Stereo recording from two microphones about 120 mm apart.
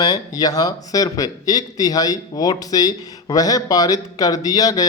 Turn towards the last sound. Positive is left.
turn(degrees=30)  # may be behind; listen again after turning